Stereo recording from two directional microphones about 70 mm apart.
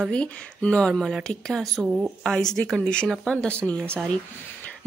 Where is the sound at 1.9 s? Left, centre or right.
Centre.